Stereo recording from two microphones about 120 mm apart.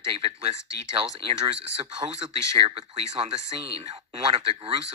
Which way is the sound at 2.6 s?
50° right (ahead or behind).